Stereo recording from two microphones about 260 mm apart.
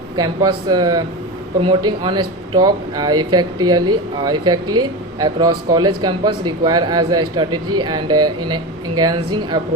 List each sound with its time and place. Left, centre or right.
0.2 s speech: centre